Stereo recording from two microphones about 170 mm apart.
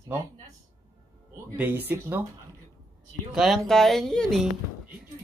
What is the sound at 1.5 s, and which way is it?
Speech, 10° right (ahead or behind).